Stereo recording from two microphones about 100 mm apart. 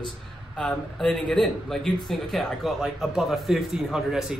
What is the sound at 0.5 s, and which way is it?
A man's voice, 5° left (ahead or behind).